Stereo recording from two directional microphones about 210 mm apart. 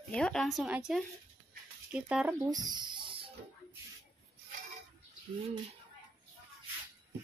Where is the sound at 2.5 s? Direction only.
20° right (ahead or behind).